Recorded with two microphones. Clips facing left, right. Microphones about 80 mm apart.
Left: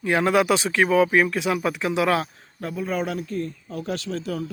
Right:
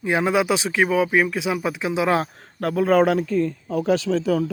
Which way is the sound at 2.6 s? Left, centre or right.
Right.